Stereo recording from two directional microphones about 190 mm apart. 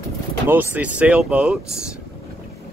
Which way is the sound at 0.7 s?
5° right (ahead or behind).